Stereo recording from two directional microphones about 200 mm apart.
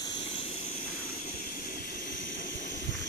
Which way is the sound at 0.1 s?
25° left (ahead or behind).